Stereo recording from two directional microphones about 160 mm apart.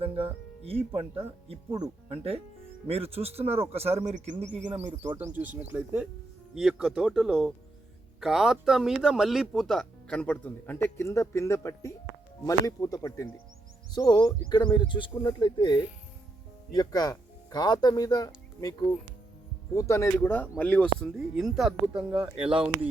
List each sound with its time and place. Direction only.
0.0 s music: 35° right (ahead or behind)
0.9 s a man's voice: 35° right (ahead or behind)
5.2 s speech: 10° right (ahead or behind); by 18.3 s 20° left (ahead or behind)
19.7 s speech: 20° left (ahead or behind); by 22.9 s 5° right (ahead or behind)